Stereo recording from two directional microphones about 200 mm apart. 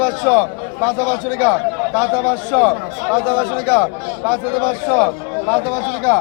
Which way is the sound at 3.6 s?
5° left (ahead or behind).